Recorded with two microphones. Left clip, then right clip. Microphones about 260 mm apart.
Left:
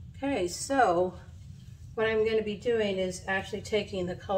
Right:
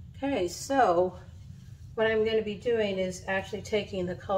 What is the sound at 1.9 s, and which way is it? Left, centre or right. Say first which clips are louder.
A woman's voice: right 1 dB; centre.